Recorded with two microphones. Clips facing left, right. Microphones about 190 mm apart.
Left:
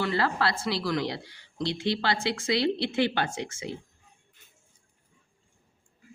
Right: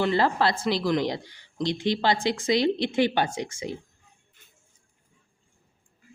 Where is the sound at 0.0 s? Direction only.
20° right (ahead or behind).